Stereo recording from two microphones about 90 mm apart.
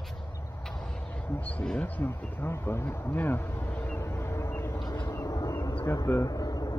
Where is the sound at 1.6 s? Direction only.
10° left (ahead or behind).